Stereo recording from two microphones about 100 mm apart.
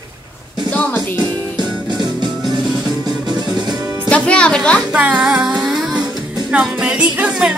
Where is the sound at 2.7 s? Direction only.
Centre (ahead or behind).